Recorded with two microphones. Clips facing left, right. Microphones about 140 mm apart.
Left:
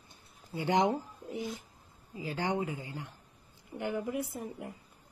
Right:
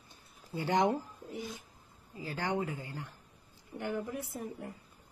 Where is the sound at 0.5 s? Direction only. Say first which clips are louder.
Left 1 dB; 20° left (ahead or behind).